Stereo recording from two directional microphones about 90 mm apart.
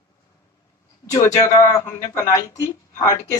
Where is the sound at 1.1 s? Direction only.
35° left (ahead or behind).